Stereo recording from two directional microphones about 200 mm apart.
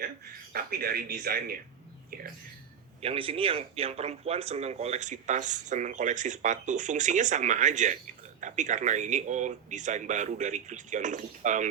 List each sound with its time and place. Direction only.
0.5 s speech: 50° right (ahead or behind)
3.0 s speech: 30° right (ahead or behind)